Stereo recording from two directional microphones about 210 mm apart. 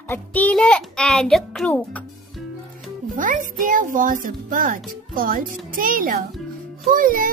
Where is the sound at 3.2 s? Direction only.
40° right (ahead or behind).